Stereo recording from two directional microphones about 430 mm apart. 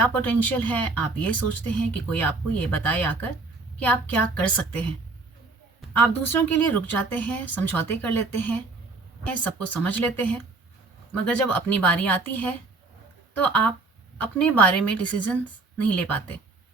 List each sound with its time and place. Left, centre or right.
0.0 s speech: centre
5.9 s speech: centre
9.2 s speech: centre